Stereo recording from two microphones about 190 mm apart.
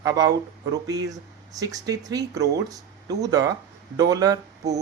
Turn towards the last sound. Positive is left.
turn(degrees=-20)  # may be behind; listen again after turning